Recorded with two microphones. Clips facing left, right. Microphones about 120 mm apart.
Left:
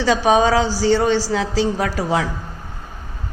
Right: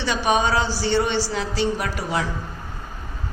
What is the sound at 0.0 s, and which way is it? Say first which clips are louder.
A woman's voice: left 6 dB; 90° left.